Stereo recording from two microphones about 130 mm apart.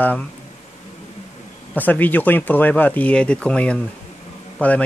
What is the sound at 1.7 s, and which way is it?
Speech, 15° left (ahead or behind).